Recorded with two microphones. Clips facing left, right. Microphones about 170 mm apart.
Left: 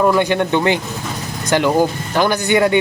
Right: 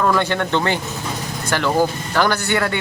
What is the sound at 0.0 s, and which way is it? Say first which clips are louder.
Speech: left 4 dB; 15° left (ahead or behind).